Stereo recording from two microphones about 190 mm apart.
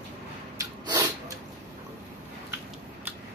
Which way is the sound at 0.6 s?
20° right (ahead or behind).